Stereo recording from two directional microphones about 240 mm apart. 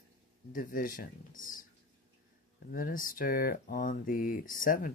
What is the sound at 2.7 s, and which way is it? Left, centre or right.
Speech, left.